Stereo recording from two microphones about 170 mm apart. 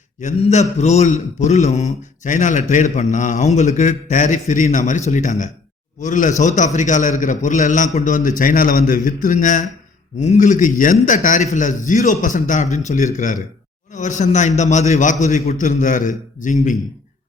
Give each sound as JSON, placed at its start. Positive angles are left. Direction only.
{"t": 0.2, "sound": "a man's voice", "side_deg": 45}